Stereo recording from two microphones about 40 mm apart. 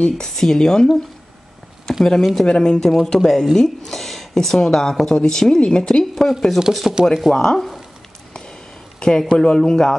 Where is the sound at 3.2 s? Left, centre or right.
Centre.